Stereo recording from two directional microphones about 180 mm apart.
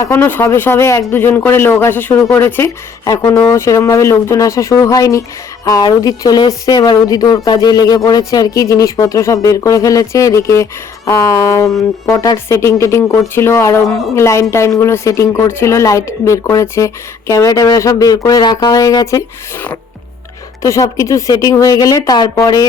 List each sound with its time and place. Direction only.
0.0 s speech: 15° left (ahead or behind)
20.6 s speech: 15° left (ahead or behind)